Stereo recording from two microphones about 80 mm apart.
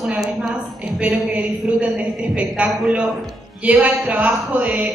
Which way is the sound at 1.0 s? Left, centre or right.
Centre.